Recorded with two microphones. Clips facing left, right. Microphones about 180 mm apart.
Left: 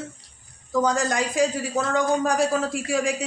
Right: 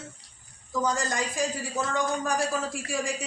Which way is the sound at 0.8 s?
75° left (ahead or behind).